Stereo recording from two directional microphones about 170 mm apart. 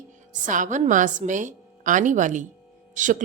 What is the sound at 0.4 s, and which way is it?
Speech, 50° right (ahead or behind).